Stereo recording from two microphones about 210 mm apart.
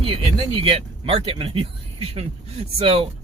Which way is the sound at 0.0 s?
25° right (ahead or behind).